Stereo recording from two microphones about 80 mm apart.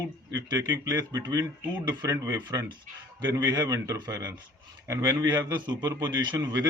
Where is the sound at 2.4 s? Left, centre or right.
Right.